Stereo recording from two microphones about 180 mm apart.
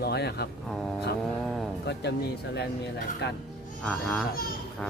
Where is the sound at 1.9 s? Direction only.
70° left (ahead or behind).